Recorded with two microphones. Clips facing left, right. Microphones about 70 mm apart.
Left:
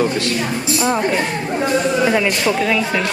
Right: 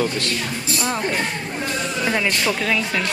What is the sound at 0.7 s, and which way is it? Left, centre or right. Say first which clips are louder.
Speech: left 5 dB; centre.